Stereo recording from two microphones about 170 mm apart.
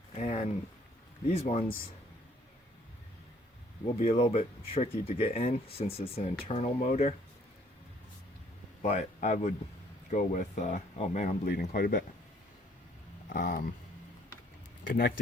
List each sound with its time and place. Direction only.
0.2 s a sound: 45° left (ahead or behind)
1.3 s speech: 40° left (ahead or behind)
3.9 s speech: 40° left (ahead or behind)
8.8 s speech: 40° left (ahead or behind)
11.4 s speech: 65° left (ahead or behind)
13.3 s speech: 55° left (ahead or behind)
14.8 s speech: 65° left (ahead or behind)